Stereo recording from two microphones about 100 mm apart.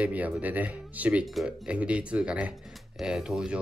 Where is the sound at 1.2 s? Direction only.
Centre (ahead or behind).